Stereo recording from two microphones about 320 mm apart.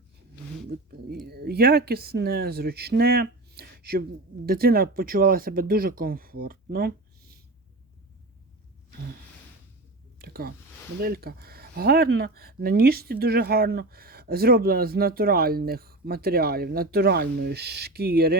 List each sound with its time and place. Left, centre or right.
0.7 s speech: right
10.2 s a sound: right
11.0 s speech: right